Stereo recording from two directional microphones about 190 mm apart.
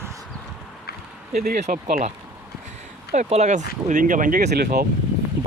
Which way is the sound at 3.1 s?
35° right (ahead or behind).